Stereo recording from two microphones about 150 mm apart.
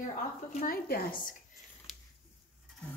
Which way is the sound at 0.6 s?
75° left (ahead or behind).